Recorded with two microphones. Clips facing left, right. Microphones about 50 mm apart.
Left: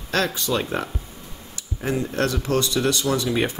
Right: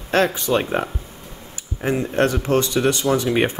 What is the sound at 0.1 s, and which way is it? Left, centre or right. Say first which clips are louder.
Speech: right 5 dB; right.